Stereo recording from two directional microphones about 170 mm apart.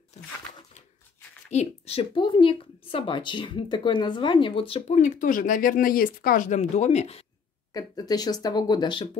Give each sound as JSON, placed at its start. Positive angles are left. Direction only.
{"t": 1.5, "sound": "speech", "side_deg": 40}
{"t": 7.7, "sound": "speech", "side_deg": 20}